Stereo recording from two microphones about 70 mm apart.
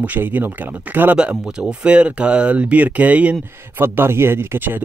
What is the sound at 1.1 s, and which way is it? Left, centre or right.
Speech, centre.